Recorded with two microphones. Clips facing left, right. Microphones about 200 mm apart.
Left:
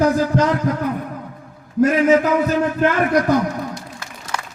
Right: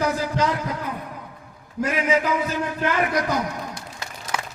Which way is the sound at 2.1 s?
50° left (ahead or behind).